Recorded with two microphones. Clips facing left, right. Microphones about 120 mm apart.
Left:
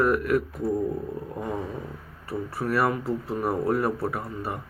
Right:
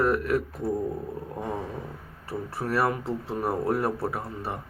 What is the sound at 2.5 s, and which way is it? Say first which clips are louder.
Speech: left 1 dB; 30° right (ahead or behind).